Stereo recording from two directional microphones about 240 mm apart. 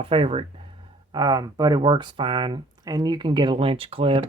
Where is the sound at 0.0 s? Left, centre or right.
Right.